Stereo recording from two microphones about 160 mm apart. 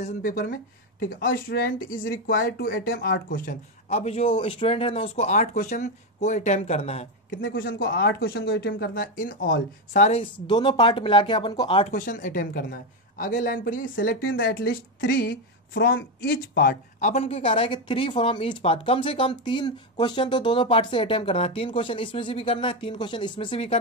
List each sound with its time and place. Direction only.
0.2 s speech: 65° left (ahead or behind)
4.0 s speech: 40° left (ahead or behind)
7.5 s a woman's voice: 75° left (ahead or behind); by 10.2 s 45° left (ahead or behind)
10.4 s speech: 30° left (ahead or behind)
11.9 s a woman's voice: 55° left (ahead or behind); by 16.7 s 75° left (ahead or behind)
17.0 s a woman's voice: 45° left (ahead or behind)
17.4 s speech: 35° left (ahead or behind)